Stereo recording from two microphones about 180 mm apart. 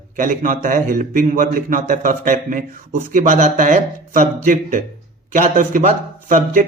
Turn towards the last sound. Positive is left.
turn(degrees=-50)  # may be behind; listen again after turning